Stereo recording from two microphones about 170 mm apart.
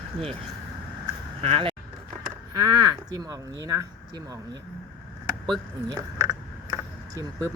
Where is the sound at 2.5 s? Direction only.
20° right (ahead or behind).